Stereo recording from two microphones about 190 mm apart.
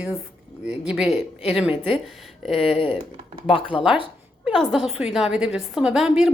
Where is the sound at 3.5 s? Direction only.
25° left (ahead or behind).